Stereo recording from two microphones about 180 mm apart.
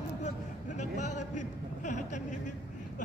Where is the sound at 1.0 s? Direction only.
40° left (ahead or behind).